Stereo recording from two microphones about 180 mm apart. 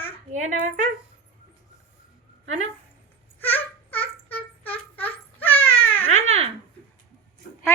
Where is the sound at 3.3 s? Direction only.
10° left (ahead or behind).